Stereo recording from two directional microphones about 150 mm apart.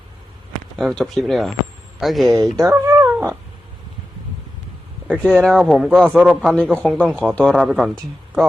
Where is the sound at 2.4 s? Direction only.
20° right (ahead or behind).